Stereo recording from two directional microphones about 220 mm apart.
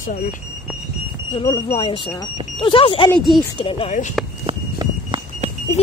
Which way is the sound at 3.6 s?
25° left (ahead or behind).